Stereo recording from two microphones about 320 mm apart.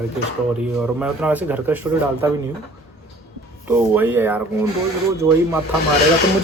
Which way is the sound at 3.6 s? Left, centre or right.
Centre.